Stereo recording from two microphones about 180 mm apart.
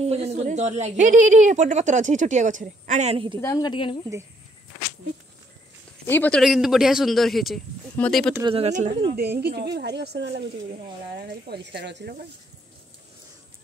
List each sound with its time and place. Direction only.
0.0 s a woman's voice: 35° right (ahead or behind)
3.3 s a woman's voice: 15° left (ahead or behind)
6.0 s a man's voice: 10° left (ahead or behind)
6.4 s a man's voice: centre (ahead or behind)
8.4 s speech: 30° right (ahead or behind)
9.1 s speech: 60° right (ahead or behind)
10.7 s speech: 60° right (ahead or behind)